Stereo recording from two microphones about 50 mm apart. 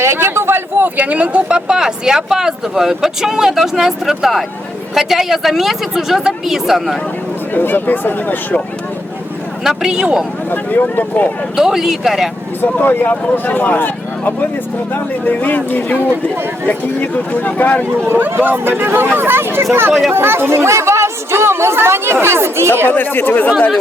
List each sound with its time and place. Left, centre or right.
0.0 s a sound: right
0.9 s speech: right; by 7.0 s centre
7.5 s speech: left
9.6 s speech: centre
10.5 s speech: left
11.5 s speech: centre
12.6 s speech: left
18.3 s speech: right
22.9 s speech: left